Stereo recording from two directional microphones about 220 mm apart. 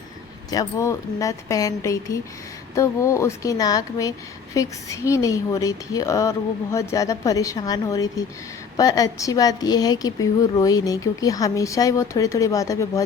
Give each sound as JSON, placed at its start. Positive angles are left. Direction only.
{"t": 0.5, "sound": "a woman's voice", "side_deg": 15}